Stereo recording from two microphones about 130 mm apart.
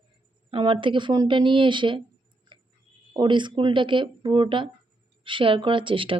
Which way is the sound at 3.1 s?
35° right (ahead or behind).